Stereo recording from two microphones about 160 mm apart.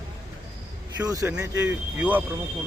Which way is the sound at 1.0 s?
20° right (ahead or behind).